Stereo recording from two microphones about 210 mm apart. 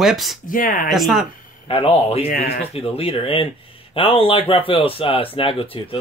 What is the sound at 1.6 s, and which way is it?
Speech, 25° left (ahead or behind).